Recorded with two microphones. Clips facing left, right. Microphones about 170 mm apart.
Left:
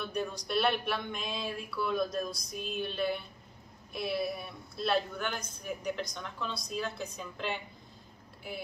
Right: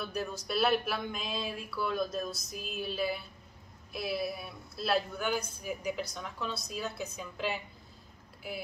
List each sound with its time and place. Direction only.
0.0 s speech: 5° right (ahead or behind)